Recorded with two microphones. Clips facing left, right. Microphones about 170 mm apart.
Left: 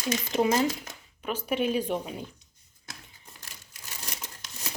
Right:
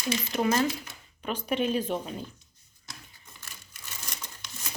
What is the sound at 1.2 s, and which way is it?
A woman's voice, 10° left (ahead or behind).